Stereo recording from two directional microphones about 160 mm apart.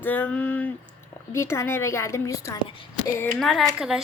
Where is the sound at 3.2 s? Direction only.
5° left (ahead or behind).